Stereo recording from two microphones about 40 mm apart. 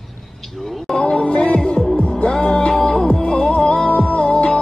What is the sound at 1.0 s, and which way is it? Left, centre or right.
Music, left.